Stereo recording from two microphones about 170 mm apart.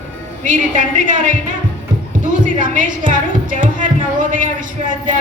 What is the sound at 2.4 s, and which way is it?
A woman's voice, 50° right (ahead or behind).